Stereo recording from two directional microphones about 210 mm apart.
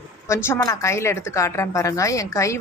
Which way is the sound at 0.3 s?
10° left (ahead or behind).